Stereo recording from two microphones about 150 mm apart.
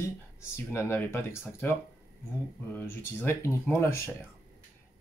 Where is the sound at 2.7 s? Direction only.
15° left (ahead or behind).